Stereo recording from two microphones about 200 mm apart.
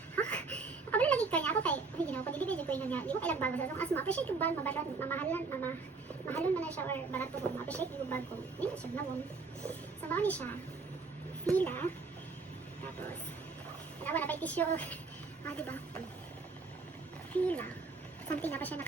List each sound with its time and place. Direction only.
0.2 s a sound: 5° left (ahead or behind)
8.1 s a woman's voice: 5° left (ahead or behind)
11.5 s a woman's voice: 10° left (ahead or behind)
14.0 s a sound: 10° left (ahead or behind)
15.4 s a woman's voice: 10° left (ahead or behind)
17.3 s a woman's voice: 5° left (ahead or behind)